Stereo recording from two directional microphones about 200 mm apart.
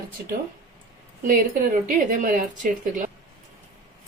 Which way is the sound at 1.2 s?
45° right (ahead or behind).